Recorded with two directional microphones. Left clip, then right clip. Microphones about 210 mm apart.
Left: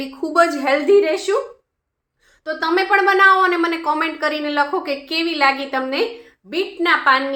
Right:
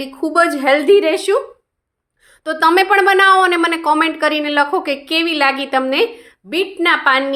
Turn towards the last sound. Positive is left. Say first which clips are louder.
# right 2 dB
turn(degrees=-35)  # may be behind; listen again after turning